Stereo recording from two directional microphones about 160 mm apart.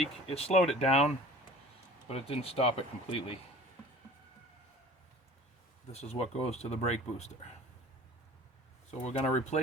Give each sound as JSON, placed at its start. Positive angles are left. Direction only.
{"t": 0.3, "sound": "speech", "side_deg": 40}
{"t": 5.9, "sound": "speech", "side_deg": 45}
{"t": 8.9, "sound": "speech", "side_deg": 45}